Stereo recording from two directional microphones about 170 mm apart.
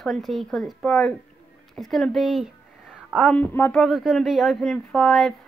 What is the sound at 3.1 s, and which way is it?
Speech, 10° left (ahead or behind).